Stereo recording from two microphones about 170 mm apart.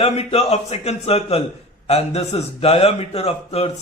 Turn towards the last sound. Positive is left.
turn(degrees=40)  # may be behind; listen again after turning